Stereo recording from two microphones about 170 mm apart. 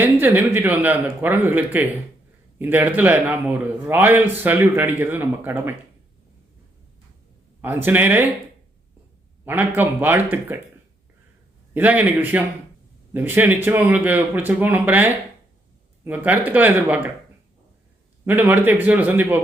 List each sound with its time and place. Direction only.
0.0 s a man's voice: 10° right (ahead or behind)
7.6 s a man's voice: 10° right (ahead or behind)
9.4 s a man's voice: 10° right (ahead or behind)
11.7 s a man's voice: 10° right (ahead or behind)
18.3 s a man's voice: 10° right (ahead or behind)